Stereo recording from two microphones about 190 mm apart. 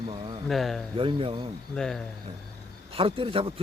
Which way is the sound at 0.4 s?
Centre (ahead or behind).